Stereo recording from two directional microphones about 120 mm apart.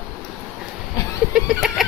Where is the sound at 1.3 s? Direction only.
5° right (ahead or behind).